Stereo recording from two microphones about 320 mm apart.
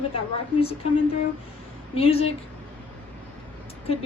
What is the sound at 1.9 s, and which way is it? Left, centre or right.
Speech, centre.